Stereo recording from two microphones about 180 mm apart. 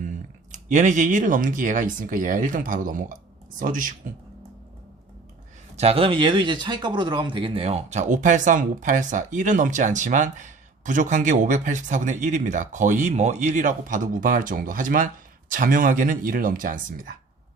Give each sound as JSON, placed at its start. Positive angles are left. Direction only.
{"t": 0.5, "sound": "speech", "side_deg": -40}
{"t": 5.7, "sound": "speech", "side_deg": -35}